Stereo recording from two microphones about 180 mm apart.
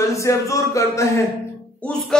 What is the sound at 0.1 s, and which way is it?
Speech, 15° left (ahead or behind).